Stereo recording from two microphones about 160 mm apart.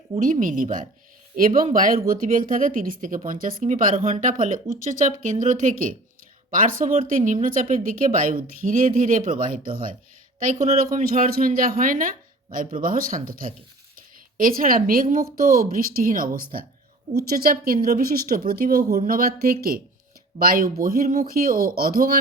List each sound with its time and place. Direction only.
0.2 s speech: 55° right (ahead or behind)